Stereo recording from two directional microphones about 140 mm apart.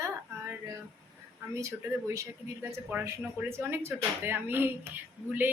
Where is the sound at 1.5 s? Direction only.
20° right (ahead or behind).